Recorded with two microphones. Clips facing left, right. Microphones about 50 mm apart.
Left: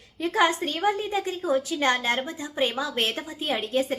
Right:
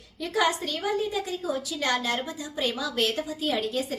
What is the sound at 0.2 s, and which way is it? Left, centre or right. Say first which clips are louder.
A woman's voice: left 3 dB; left.